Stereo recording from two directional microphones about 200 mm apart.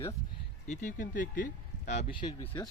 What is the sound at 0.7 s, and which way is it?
Speech, 40° left (ahead or behind).